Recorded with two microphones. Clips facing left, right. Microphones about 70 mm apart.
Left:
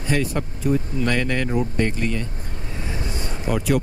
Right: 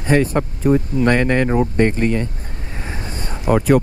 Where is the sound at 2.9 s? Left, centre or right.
Right.